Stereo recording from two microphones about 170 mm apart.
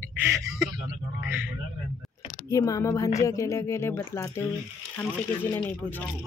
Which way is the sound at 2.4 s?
20° left (ahead or behind).